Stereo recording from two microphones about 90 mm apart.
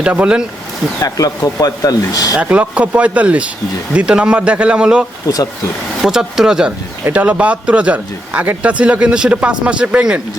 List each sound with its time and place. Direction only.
0.0 s a man's voice: 15° right (ahead or behind)
1.0 s speech: 40° left (ahead or behind)
2.3 s a man's voice: 15° right (ahead or behind)